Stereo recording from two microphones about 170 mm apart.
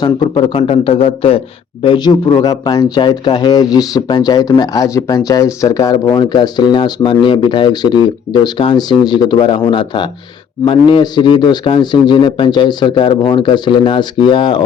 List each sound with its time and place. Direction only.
0.0 s a man's voice: 30° left (ahead or behind)